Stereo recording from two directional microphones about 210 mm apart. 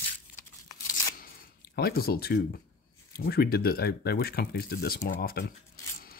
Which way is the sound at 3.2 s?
45° left (ahead or behind).